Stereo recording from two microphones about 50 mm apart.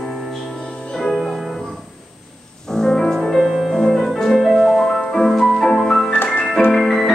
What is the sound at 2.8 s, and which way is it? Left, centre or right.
Music, centre.